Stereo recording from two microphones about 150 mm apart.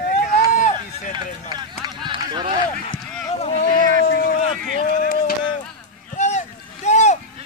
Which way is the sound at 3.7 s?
75° left (ahead or behind).